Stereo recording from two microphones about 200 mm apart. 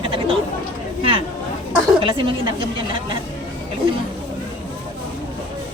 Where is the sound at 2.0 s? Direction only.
25° right (ahead or behind).